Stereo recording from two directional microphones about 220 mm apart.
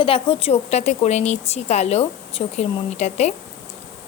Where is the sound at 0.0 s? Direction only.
25° left (ahead or behind).